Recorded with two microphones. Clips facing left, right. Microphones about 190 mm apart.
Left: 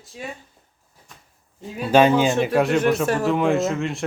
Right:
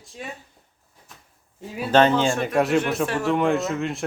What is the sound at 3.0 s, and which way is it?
Speech, 40° left (ahead or behind).